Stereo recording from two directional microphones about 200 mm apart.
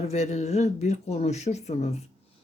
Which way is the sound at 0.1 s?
35° left (ahead or behind).